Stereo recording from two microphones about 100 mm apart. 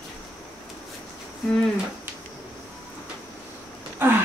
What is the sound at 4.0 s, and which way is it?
Speech, 20° right (ahead or behind).